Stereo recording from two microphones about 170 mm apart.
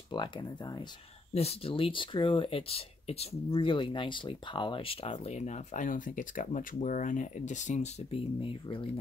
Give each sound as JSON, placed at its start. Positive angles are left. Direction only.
{"t": 0.1, "sound": "speech", "side_deg": 25}
{"t": 1.3, "sound": "speech", "side_deg": 35}